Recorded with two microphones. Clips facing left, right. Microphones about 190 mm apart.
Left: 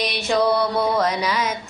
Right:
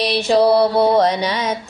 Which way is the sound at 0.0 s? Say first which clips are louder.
Right 6 dB; 30° right (ahead or behind).